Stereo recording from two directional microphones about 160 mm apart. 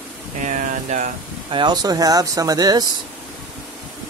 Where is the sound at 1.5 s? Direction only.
25° right (ahead or behind).